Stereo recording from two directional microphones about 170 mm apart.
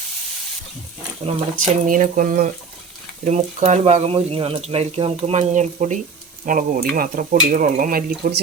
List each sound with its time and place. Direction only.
1.5 s speech: 50° right (ahead or behind)
3.2 s speech: 40° right (ahead or behind)